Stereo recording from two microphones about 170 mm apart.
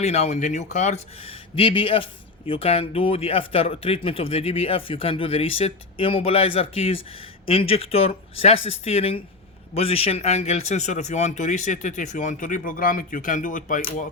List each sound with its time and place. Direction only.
0.0 s speech: 40° left (ahead or behind)